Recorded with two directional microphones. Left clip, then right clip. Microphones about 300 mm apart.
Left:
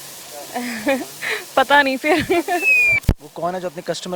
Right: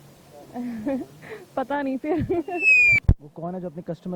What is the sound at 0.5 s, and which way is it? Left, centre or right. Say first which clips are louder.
Speech: left 8 dB; centre.